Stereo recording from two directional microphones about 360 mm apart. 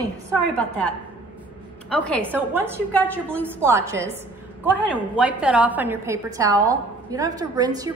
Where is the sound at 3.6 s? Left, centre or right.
Centre.